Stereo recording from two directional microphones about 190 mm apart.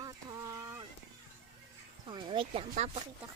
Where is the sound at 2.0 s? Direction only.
25° right (ahead or behind).